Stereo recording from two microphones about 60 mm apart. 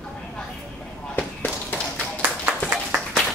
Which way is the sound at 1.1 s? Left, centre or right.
Left.